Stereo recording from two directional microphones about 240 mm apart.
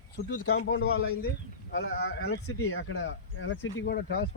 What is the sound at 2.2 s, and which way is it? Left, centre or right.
Speech, left.